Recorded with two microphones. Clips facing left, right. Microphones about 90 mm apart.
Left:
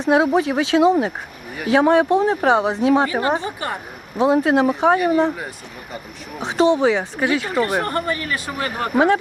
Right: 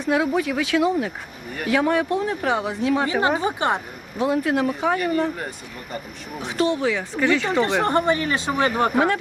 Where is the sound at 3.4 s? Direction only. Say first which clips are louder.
Right 4 dB; 20° right (ahead or behind).